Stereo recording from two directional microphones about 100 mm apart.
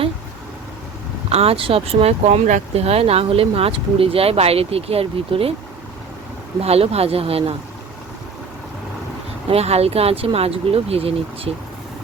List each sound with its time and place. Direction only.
1.3 s speech: 85° right
6.6 s speech: 85° right
9.5 s speech: 90° right